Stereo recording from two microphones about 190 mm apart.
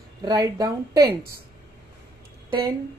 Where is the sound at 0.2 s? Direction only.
20° right (ahead or behind).